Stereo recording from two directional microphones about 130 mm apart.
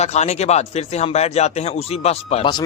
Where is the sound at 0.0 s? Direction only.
60° left (ahead or behind).